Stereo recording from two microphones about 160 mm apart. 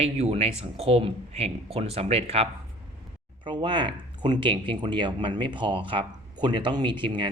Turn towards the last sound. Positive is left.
turn(degrees=-30)  # may be behind; listen again after turning